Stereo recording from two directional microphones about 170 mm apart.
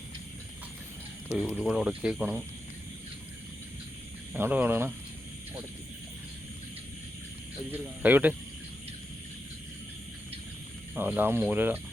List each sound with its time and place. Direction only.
1.3 s speech: 5° right (ahead or behind)
4.4 s speech: 10° right (ahead or behind)
7.7 s speech: 10° right (ahead or behind)
10.9 s speech: 10° right (ahead or behind)